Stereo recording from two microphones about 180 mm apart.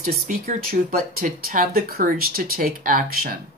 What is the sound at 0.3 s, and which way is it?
Speech, 50° right (ahead or behind).